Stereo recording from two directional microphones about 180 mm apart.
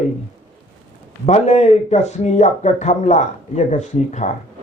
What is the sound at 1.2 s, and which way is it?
Speech, 40° left (ahead or behind).